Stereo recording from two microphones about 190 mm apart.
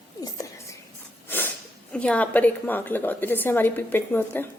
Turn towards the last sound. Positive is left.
turn(degrees=10)  # may be behind; listen again after turning